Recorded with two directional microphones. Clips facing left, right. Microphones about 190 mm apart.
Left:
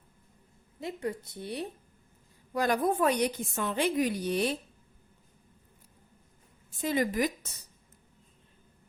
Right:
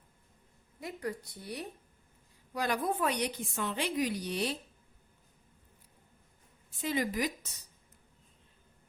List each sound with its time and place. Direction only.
0.8 s a woman's voice: 25° left (ahead or behind)
2.5 s a woman's voice: 45° left (ahead or behind)
6.8 s a woman's voice: 50° left (ahead or behind)